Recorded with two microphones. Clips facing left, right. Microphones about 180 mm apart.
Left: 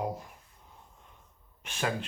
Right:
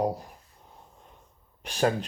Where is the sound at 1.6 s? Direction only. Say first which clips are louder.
Right 7 dB; 35° right (ahead or behind).